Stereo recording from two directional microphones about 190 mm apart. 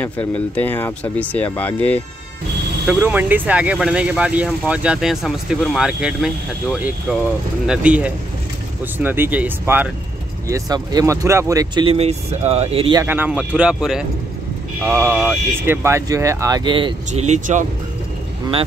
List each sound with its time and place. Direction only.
0.0 s speech: 10° left (ahead or behind)
2.9 s speech: 10° right (ahead or behind)
10.5 s speech: 20° right (ahead or behind)
13.0 s speech: 10° right (ahead or behind); by 17.6 s 40° right (ahead or behind)